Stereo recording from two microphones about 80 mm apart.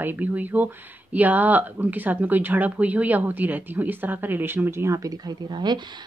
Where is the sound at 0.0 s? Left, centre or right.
Right.